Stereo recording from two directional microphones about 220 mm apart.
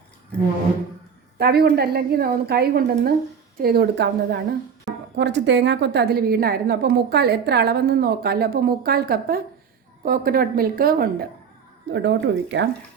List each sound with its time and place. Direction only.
1.4 s a woman's voice: 45° right (ahead or behind)
11.9 s a woman's voice: 55° right (ahead or behind)